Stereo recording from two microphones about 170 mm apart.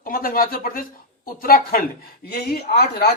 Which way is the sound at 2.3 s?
70° left (ahead or behind).